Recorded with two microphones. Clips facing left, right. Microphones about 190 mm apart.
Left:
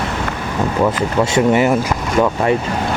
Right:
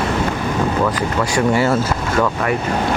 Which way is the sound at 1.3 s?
20° left (ahead or behind).